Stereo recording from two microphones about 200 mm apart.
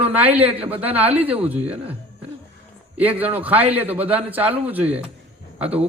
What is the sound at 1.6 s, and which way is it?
Speech, 30° right (ahead or behind).